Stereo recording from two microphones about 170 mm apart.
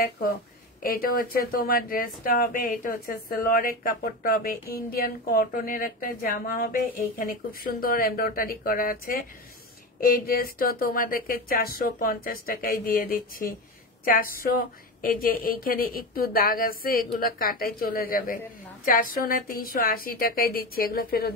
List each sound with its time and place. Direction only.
0.8 s a woman's voice: 60° left (ahead or behind)